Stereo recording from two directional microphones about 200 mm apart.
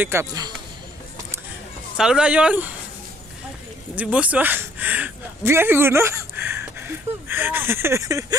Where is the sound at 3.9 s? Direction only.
5° right (ahead or behind).